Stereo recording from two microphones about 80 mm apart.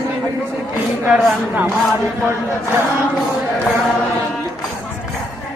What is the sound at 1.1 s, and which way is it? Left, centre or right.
Speech, right.